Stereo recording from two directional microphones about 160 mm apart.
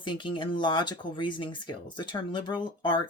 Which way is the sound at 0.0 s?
30° left (ahead or behind).